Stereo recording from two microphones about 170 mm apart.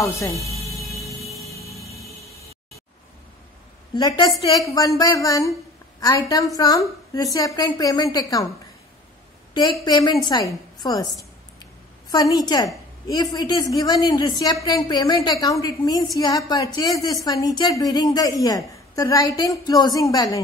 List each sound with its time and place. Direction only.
0.0 s speech: 20° left (ahead or behind)
0.4 s a sound: 35° left (ahead or behind)
0.9 s vehicle: centre (ahead or behind)
3.9 s a woman's voice: 25° left (ahead or behind)
9.5 s a woman's voice: 25° left (ahead or behind)
12.1 s a woman's voice: 20° left (ahead or behind)